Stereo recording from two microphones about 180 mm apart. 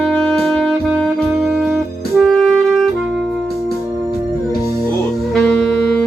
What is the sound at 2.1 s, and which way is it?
Music, centre (ahead or behind).